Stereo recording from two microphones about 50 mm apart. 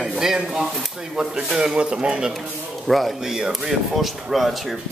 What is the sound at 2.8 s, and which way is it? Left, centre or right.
Speech, centre.